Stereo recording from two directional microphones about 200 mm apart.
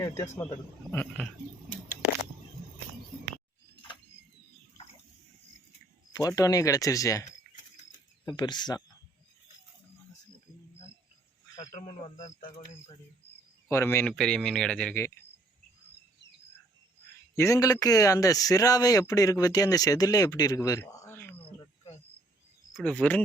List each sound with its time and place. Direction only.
0.0 s a man's voice: 15° left (ahead or behind)
6.1 s a man's voice: 15° left (ahead or behind)
12.0 s speech: 35° left (ahead or behind)
13.7 s a man's voice: 10° left (ahead or behind)
17.3 s a man's voice: 15° left (ahead or behind)
22.7 s a man's voice: 5° left (ahead or behind)